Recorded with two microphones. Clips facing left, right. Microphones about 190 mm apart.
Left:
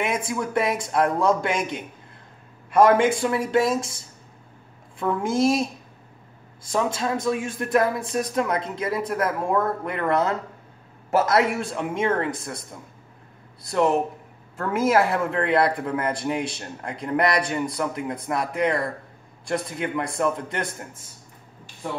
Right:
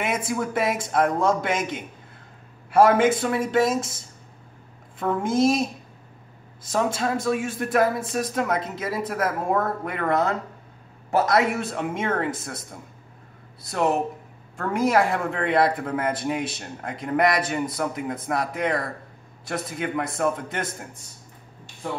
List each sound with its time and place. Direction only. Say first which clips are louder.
0.3 s a man's voice: even; centre (ahead or behind)
6.7 s a man's voice: even; centre (ahead or behind)
13.7 s a man's voice: left 2 dB; 5° right (ahead or behind)